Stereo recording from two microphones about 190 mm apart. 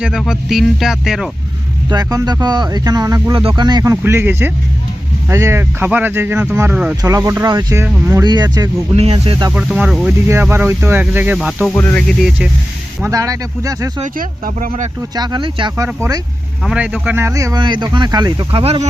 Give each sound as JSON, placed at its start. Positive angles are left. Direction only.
{"t": 0.0, "sound": "speech", "side_deg": 0}
{"t": 1.9, "sound": "speech", "side_deg": -20}
{"t": 9.0, "sound": "speech", "side_deg": -30}
{"t": 9.5, "sound": "speech", "side_deg": -5}
{"t": 11.7, "sound": "speech", "side_deg": 10}
{"t": 13.0, "sound": "speech", "side_deg": -15}
{"t": 14.0, "sound": "speech", "side_deg": -45}
{"t": 15.1, "sound": "speech", "side_deg": -20}
{"t": 15.7, "sound": "speech", "side_deg": -10}